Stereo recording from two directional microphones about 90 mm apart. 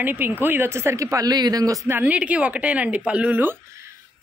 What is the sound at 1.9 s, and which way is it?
Speech, 20° right (ahead or behind).